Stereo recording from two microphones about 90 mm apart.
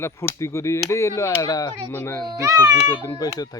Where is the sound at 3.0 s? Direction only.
45° left (ahead or behind).